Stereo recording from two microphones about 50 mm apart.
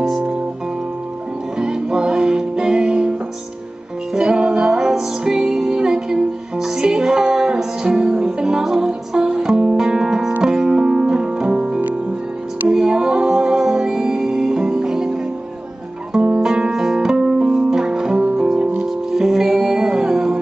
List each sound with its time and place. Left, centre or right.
1.6 s music: centre
16.3 s music: centre
19.1 s music: centre